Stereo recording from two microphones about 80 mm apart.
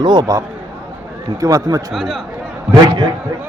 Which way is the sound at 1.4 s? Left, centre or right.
Right.